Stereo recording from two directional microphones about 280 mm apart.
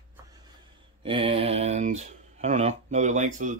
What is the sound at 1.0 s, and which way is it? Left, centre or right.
Speech, centre.